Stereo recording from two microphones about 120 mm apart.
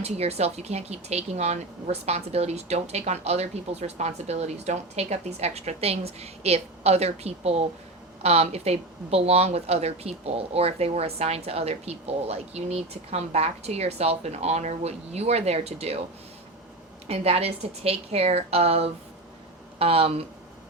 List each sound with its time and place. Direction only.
0.0 s speech: 60° right (ahead or behind)
17.1 s speech: 60° right (ahead or behind)